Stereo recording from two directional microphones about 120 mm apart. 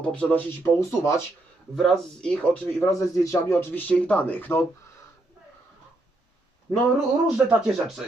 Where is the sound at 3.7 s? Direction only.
15° left (ahead or behind).